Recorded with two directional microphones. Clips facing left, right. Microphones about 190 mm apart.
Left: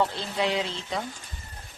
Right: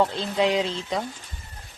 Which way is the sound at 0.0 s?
15° right (ahead or behind).